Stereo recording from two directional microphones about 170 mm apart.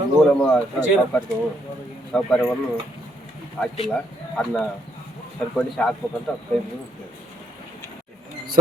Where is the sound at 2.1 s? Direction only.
5° left (ahead or behind).